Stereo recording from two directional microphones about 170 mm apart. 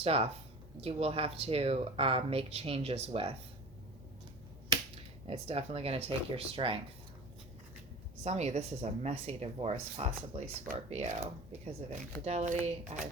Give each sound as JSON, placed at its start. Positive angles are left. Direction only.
{"t": 0.0, "sound": "speech", "side_deg": -35}
{"t": 5.2, "sound": "speech", "side_deg": -35}
{"t": 8.2, "sound": "speech", "side_deg": -40}